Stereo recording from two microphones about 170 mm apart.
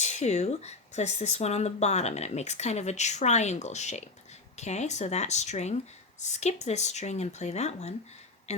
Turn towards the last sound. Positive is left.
turn(degrees=40)  # may be behind; listen again after turning